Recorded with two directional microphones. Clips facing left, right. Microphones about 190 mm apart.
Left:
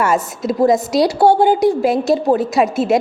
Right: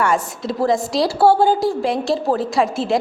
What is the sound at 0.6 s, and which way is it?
A woman's voice, 20° left (ahead or behind).